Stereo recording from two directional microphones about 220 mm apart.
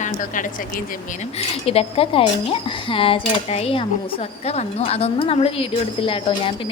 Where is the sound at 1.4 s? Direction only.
25° left (ahead or behind).